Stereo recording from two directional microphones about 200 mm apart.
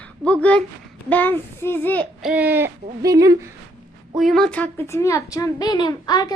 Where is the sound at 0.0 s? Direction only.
5° left (ahead or behind).